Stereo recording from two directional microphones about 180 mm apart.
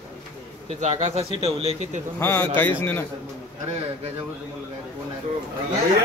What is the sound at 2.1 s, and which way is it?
Speech, 15° left (ahead or behind).